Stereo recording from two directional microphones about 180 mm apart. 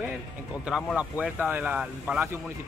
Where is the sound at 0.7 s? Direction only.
5° right (ahead or behind).